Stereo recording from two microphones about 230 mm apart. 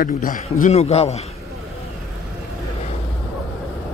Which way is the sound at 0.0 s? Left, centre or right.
Left.